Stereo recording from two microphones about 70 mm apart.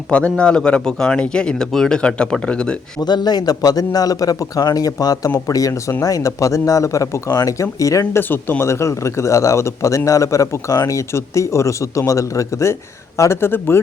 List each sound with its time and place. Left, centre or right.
0.1 s speech: centre
3.0 s a man's voice: left
8.2 s speech: left
8.7 s a man's voice: left